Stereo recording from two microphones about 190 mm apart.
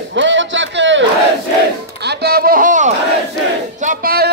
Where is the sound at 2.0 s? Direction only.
55° right (ahead or behind).